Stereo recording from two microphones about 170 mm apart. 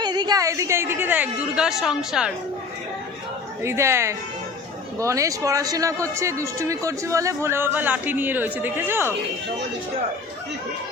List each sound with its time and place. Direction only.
0.0 s speech: 25° right (ahead or behind); by 2.3 s 5° right (ahead or behind)
3.6 s speech: 15° right (ahead or behind)